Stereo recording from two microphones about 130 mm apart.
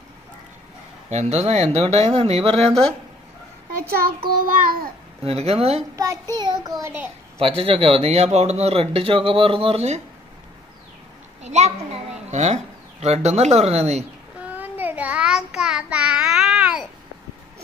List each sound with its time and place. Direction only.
1.1 s speech: 55° right (ahead or behind)
4.4 s child singing: 90° right
5.2 s speech: 50° right (ahead or behind)
6.3 s child singing: 35° right (ahead or behind)
6.8 s a child's voice: 20° right (ahead or behind)
7.3 s speech: 45° right (ahead or behind)
11.4 s a sound: 60° right (ahead or behind)
13.0 s speech: 55° right (ahead or behind)
14.5 s child singing: 15° right (ahead or behind)